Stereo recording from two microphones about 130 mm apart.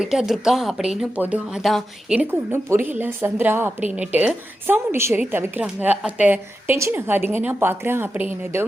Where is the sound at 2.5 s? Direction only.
20° right (ahead or behind).